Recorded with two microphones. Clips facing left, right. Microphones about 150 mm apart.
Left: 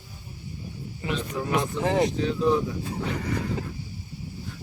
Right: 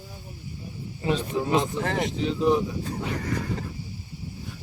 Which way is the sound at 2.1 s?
20° right (ahead or behind).